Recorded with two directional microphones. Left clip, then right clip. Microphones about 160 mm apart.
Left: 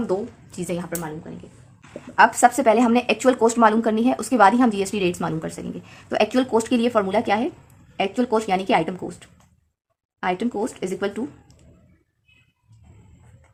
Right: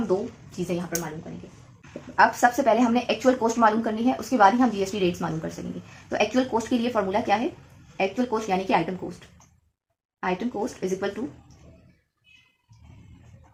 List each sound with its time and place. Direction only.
0.1 s speech: 35° left (ahead or behind)
1.8 s speech: 60° left (ahead or behind)
10.2 s speech: 60° left (ahead or behind)